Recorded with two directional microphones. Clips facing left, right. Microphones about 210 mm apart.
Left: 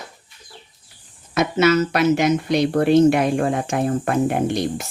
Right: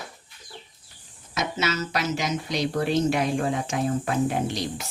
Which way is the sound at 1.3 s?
60° left (ahead or behind).